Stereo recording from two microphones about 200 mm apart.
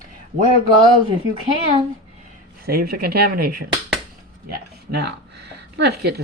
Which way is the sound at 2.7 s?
50° right (ahead or behind).